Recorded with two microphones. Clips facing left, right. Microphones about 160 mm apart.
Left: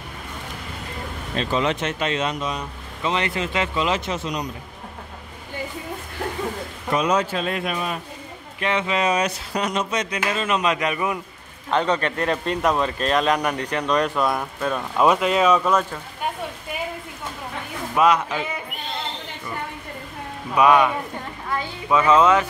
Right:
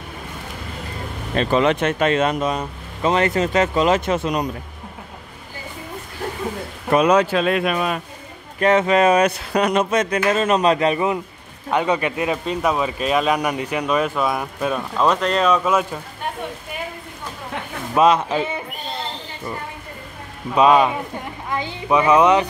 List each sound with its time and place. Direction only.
1.3 s speech: 60° right (ahead or behind)
6.9 s speech: 60° right (ahead or behind); by 8.0 s 75° right (ahead or behind)
8.5 s speech: 45° right (ahead or behind); by 11.1 s 30° right (ahead or behind)
11.7 s speech: 10° right (ahead or behind)
15.0 s speech: 10° left (ahead or behind); by 16.0 s 10° right (ahead or behind)
17.9 s speech: 25° right (ahead or behind)
20.5 s speech: 25° right (ahead or behind)